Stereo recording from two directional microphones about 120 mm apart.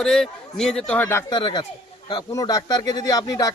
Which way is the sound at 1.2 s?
35° left (ahead or behind).